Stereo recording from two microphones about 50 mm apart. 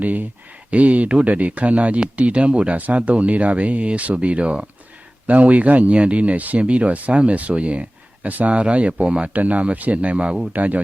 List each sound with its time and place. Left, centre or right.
0.0 s speech: right